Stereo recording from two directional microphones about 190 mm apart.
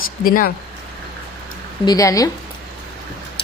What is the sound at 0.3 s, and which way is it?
Speech, 50° left (ahead or behind).